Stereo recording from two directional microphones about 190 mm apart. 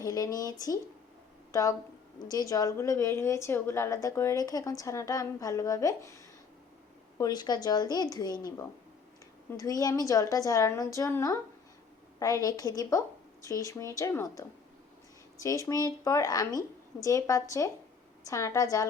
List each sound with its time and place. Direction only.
0.0 s speech: 20° left (ahead or behind)
1.5 s a woman's voice: 15° left (ahead or behind)
7.2 s a woman's voice: 20° left (ahead or behind)